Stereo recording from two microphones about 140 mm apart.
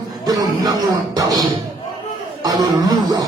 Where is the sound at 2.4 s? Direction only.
25° right (ahead or behind).